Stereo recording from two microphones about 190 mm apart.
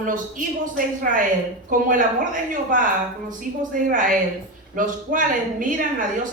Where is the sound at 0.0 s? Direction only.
45° right (ahead or behind).